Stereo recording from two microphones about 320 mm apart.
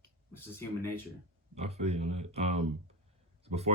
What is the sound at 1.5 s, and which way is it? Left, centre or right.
Speech, centre.